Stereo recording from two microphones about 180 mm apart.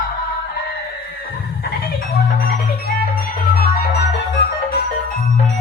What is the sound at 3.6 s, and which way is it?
Music, 65° left (ahead or behind).